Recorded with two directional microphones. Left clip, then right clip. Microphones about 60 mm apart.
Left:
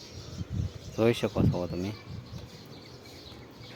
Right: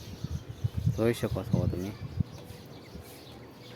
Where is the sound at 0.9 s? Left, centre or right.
Centre.